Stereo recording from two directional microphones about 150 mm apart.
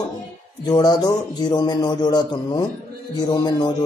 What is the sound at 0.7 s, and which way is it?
A man's voice, 30° left (ahead or behind).